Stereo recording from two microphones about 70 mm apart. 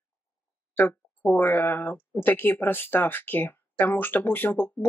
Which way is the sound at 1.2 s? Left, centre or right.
Centre.